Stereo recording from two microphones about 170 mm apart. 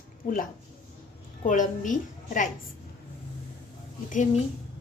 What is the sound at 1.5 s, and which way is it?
A woman's voice, 50° left (ahead or behind).